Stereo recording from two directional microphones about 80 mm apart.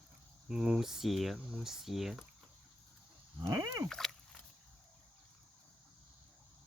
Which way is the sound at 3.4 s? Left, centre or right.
Right.